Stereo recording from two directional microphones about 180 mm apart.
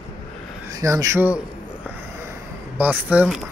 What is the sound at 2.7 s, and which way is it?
Speech, 10° right (ahead or behind).